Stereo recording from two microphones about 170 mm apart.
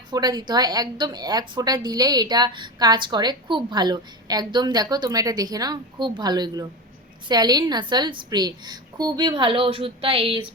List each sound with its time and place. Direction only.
0.1 s a woman's voice: 25° right (ahead or behind)